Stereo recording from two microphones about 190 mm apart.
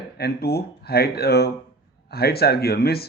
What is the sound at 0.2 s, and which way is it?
Speech, 55° left (ahead or behind).